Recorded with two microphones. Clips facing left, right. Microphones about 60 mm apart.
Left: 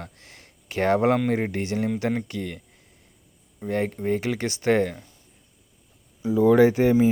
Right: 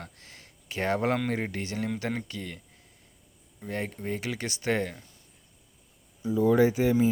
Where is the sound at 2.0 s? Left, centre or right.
Left.